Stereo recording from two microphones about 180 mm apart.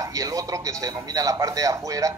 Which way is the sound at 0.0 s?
20° right (ahead or behind).